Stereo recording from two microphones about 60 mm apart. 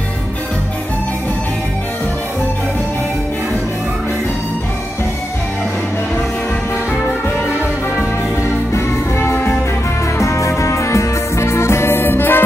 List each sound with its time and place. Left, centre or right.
8.7 s music: left